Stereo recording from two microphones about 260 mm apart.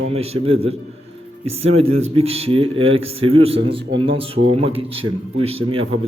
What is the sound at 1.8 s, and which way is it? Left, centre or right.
A man's voice, right.